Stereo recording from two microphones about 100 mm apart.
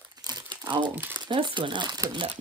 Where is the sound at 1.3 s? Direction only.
50° right (ahead or behind).